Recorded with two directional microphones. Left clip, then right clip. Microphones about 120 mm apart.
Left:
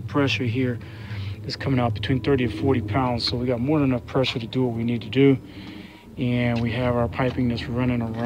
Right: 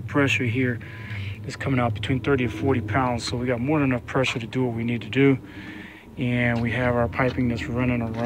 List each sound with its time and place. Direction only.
0.1 s speech: 10° left (ahead or behind)
1.6 s speech: 20° left (ahead or behind)
7.2 s speech: 10° left (ahead or behind)